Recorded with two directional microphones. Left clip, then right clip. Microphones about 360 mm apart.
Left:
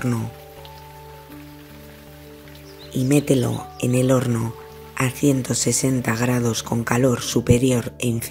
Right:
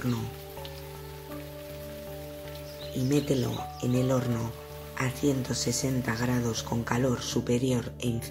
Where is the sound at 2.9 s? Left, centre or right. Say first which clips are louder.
Left 9 dB; centre.